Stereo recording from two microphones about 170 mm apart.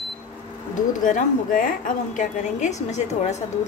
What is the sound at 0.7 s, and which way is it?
A woman's voice, 50° left (ahead or behind).